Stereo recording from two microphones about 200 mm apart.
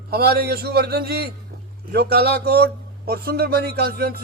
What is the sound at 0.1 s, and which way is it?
Speech, 50° right (ahead or behind).